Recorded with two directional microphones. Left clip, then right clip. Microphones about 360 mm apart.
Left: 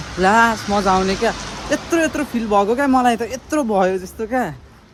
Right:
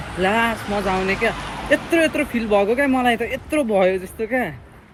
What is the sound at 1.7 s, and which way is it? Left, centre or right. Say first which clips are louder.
Speech: right 1 dB; centre.